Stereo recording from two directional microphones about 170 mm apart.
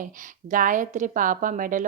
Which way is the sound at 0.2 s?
50° right (ahead or behind).